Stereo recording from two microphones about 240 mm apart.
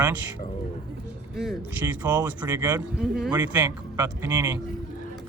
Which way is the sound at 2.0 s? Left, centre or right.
Centre.